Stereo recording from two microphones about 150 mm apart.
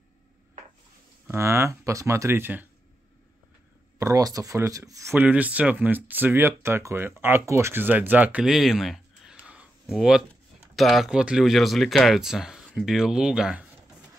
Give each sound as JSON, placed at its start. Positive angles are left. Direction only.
{"t": 1.2, "sound": "speech", "side_deg": -15}
{"t": 4.0, "sound": "speech", "side_deg": -25}
{"t": 9.5, "sound": "a sound", "side_deg": -5}
{"t": 10.8, "sound": "speech", "side_deg": 0}